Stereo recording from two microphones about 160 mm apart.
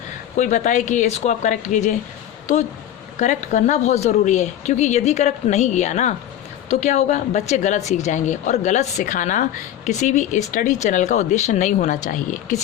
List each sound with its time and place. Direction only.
0.3 s speech: 50° left (ahead or behind)
3.2 s speech: 50° left (ahead or behind)